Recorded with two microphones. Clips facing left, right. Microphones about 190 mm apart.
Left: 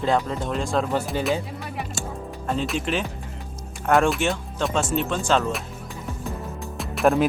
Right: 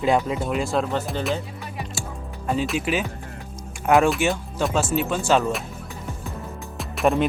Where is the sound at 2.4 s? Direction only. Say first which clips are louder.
Right 2 dB; 5° right (ahead or behind).